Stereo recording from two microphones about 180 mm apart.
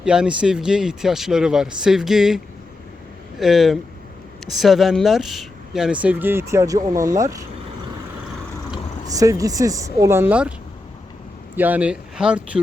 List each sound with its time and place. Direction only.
0.0 s speech: 5° right (ahead or behind)
3.4 s speech: centre (ahead or behind); by 7.4 s 20° right (ahead or behind)
9.1 s speech: 20° right (ahead or behind)
11.5 s speech: 10° right (ahead or behind)